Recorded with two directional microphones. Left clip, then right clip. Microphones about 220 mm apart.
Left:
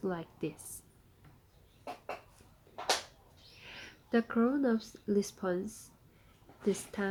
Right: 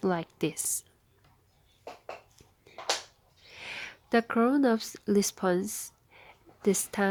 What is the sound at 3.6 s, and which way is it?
Speech, 45° right (ahead or behind).